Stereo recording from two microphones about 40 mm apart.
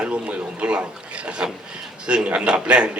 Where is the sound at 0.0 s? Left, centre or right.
Right.